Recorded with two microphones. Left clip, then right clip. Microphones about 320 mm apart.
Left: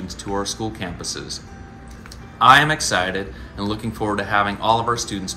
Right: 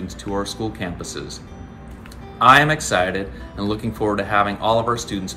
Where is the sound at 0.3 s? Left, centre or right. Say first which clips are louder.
Even; centre.